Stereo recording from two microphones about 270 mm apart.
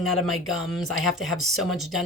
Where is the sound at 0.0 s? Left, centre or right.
Centre.